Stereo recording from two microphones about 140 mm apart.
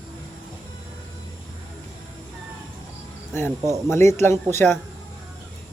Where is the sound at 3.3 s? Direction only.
15° left (ahead or behind).